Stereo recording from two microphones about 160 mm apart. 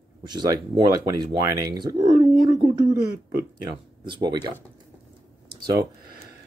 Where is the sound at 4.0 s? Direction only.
30° right (ahead or behind).